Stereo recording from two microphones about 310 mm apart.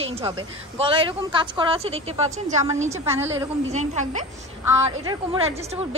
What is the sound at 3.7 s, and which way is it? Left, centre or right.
A woman's voice, right.